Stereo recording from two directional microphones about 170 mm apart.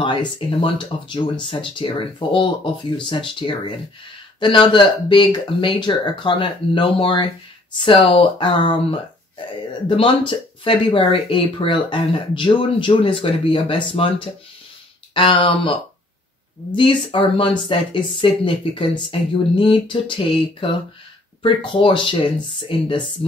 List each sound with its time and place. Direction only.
0.0 s speech: 30° left (ahead or behind)
15.1 s speech: 30° left (ahead or behind)